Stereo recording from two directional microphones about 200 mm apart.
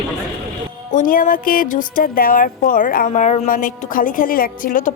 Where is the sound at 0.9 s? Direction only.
40° left (ahead or behind).